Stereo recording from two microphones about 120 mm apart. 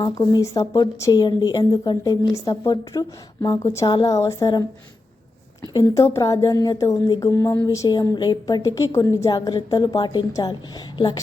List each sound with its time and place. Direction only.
0.0 s a woman's voice: 35° left (ahead or behind)
5.7 s speech: 25° left (ahead or behind)
7.9 s a woman's voice: 35° left (ahead or behind)